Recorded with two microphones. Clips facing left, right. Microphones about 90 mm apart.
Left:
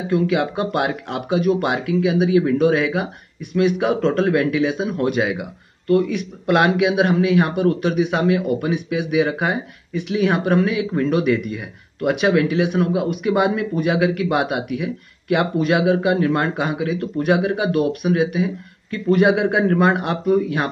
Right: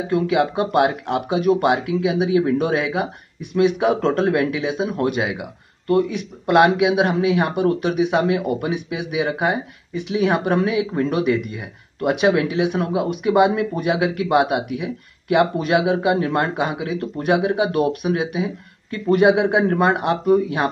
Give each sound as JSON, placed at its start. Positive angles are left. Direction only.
{"t": 0.1, "sound": "speech", "side_deg": -25}
{"t": 18.9, "sound": "speech", "side_deg": -30}
{"t": 19.2, "sound": "speech", "side_deg": -20}